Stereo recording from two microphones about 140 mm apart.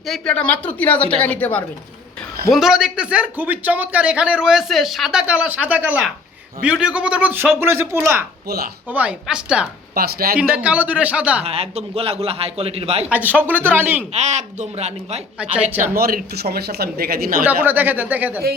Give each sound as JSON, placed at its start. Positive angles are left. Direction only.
{"t": 0.1, "sound": "a woman's voice", "side_deg": 5}
{"t": 2.5, "sound": "a man's voice", "side_deg": -5}
{"t": 9.9, "sound": "speech", "side_deg": -90}
{"t": 10.3, "sound": "a man's voice", "side_deg": -10}
{"t": 11.4, "sound": "a man's voice", "side_deg": -45}
{"t": 13.1, "sound": "a man's voice", "side_deg": -10}
{"t": 14.1, "sound": "a man's voice", "side_deg": -55}
{"t": 15.9, "sound": "speech", "side_deg": -90}
{"t": 17.4, "sound": "a man's voice", "side_deg": -15}